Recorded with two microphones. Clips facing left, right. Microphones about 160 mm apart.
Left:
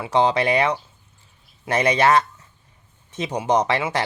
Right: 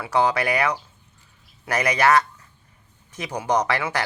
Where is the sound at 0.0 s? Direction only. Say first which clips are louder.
Left 2 dB; 25° left (ahead or behind).